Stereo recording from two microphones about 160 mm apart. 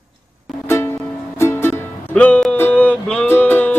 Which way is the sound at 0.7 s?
15° left (ahead or behind).